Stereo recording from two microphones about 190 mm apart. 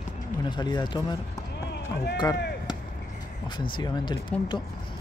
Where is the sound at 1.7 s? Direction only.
60° left (ahead or behind).